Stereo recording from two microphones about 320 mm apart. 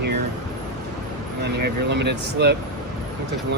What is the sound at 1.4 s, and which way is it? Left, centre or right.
Speech, right.